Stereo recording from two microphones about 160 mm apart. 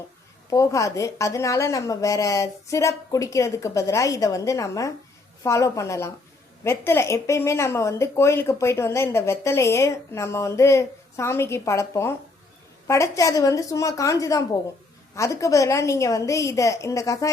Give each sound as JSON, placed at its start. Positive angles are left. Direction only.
{"t": 0.5, "sound": "a woman's voice", "side_deg": 20}